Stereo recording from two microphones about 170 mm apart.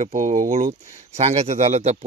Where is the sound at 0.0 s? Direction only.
45° right (ahead or behind).